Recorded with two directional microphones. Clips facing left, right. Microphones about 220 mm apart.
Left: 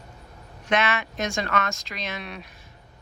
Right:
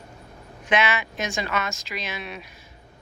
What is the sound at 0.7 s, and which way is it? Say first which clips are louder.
Speech: right 1 dB; 5° right (ahead or behind).